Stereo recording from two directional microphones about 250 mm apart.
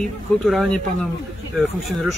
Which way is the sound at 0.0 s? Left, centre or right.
Centre.